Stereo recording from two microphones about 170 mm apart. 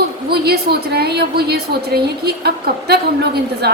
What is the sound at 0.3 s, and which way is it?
Speech, 70° right (ahead or behind).